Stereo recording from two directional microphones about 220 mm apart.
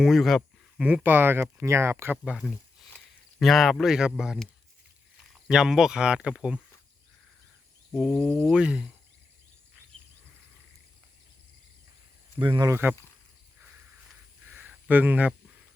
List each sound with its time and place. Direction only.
0.0 s speech: centre (ahead or behind)
7.9 s speech: centre (ahead or behind)
12.4 s speech: 20° right (ahead or behind)
14.5 s a sound: 10° right (ahead or behind)